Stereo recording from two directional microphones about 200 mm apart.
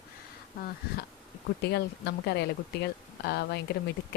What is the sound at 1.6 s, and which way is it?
A woman's voice, 55° left (ahead or behind).